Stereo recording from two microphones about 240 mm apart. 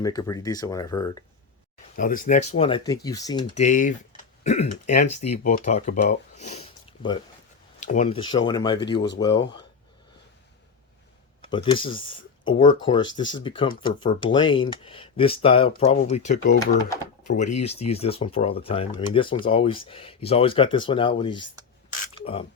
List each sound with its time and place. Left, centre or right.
0.0 s speech: centre
2.0 s speech: left; by 3.6 s centre
3.6 s speech: left
11.4 s speech: left